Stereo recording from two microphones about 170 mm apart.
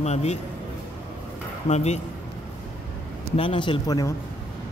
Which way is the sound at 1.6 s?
40° left (ahead or behind).